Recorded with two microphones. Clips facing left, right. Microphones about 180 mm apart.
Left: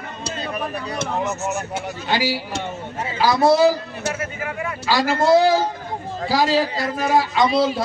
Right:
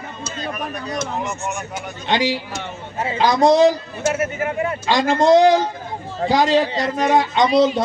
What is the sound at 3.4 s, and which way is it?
Speech, 5° left (ahead or behind).